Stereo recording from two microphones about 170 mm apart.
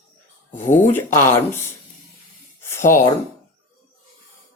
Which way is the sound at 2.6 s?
15° left (ahead or behind).